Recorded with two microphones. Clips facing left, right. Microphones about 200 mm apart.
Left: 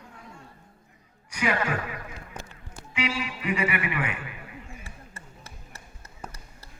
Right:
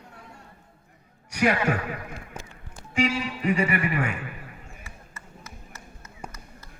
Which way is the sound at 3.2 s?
40° right (ahead or behind).